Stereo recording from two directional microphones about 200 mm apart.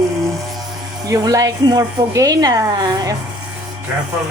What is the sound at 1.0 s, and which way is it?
Speech, 20° right (ahead or behind).